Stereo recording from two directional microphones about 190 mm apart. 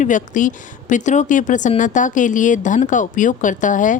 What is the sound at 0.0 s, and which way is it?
Speech, 40° left (ahead or behind).